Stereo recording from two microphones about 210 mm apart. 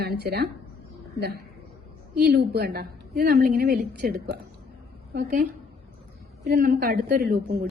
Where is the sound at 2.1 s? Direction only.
50° right (ahead or behind).